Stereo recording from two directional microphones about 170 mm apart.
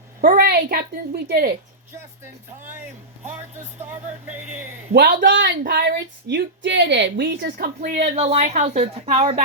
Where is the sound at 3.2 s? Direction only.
40° right (ahead or behind).